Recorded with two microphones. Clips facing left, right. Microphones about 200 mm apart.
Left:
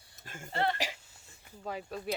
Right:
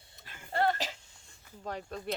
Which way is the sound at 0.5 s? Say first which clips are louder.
Right 3 dB; 40° right (ahead or behind).